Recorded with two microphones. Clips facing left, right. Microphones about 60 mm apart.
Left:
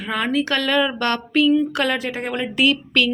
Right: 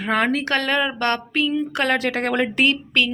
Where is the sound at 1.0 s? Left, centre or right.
Right.